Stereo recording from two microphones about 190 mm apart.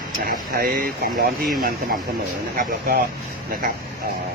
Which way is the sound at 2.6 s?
50° right (ahead or behind).